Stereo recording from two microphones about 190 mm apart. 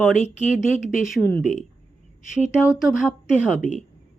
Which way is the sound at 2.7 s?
Centre (ahead or behind).